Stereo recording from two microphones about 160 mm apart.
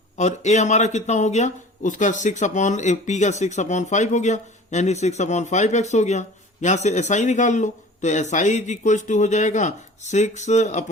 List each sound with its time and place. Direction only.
0.2 s speech: 45° left (ahead or behind)